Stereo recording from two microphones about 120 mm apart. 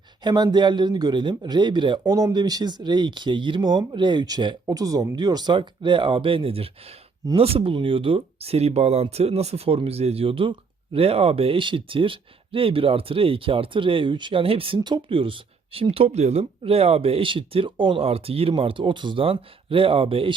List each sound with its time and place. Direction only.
0.2 s speech: 35° right (ahead or behind)